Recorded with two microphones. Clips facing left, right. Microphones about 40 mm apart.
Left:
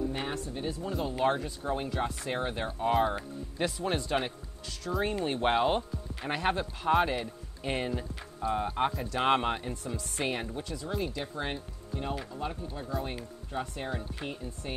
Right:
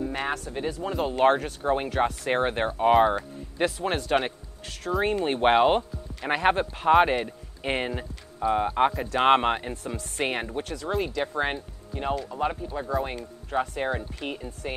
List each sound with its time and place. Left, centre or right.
0.1 s speech: right
1.9 s speech: right
2.2 s speech: right
10.6 s speech: right
11.2 s speech: right
12.9 s speech: centre
13.5 s speech: right